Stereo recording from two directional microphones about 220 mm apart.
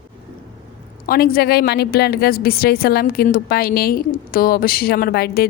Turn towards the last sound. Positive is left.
turn(degrees=45)  # may be behind; listen again after turning